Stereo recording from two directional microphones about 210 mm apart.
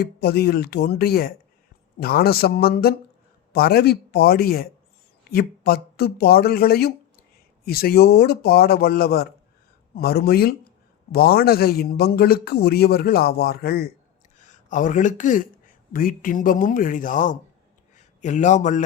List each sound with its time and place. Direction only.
0.0 s a man's voice: 50° left (ahead or behind)